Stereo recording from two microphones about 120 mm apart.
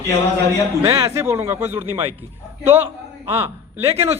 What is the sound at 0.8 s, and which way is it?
A man's voice, 25° right (ahead or behind).